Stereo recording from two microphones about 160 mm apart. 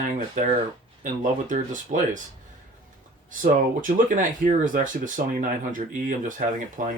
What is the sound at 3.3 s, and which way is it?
Speech, 55° right (ahead or behind).